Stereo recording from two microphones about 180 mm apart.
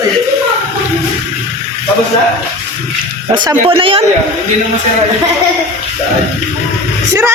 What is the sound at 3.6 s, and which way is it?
Speech, 30° right (ahead or behind).